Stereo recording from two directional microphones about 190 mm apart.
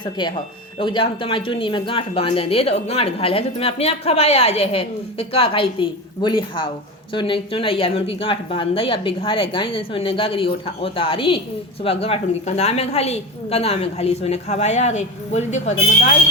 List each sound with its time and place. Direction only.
0.0 s a woman's voice: 25° left (ahead or behind)